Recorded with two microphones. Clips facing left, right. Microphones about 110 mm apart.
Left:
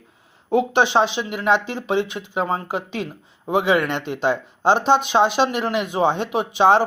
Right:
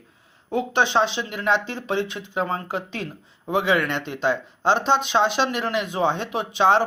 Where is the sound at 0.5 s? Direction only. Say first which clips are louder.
Left 4 dB; 5° left (ahead or behind).